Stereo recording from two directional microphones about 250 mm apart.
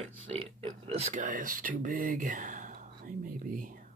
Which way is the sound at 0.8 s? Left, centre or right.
Right.